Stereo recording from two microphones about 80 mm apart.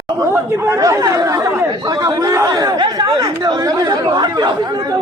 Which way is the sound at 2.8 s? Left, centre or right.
Right.